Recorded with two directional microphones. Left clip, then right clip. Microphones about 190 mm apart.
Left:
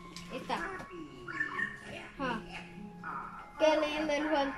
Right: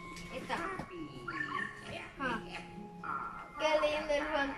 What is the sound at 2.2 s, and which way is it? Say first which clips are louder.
Music: left 1 dB; 20° left (ahead or behind).